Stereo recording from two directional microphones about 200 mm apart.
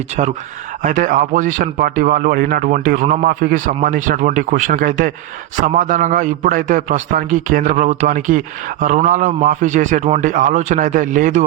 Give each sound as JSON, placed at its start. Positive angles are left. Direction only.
{"t": 0.8, "sound": "a man's voice", "side_deg": -40}